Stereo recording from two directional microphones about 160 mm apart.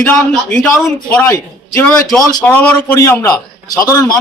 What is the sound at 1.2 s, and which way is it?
A man's voice, 20° left (ahead or behind).